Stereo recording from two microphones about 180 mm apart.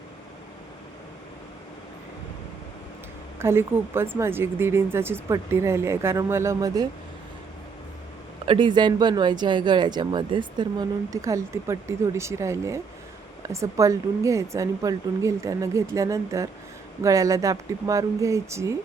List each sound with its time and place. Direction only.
3.3 s speech: 15° right (ahead or behind)
8.4 s speech: 25° right (ahead or behind)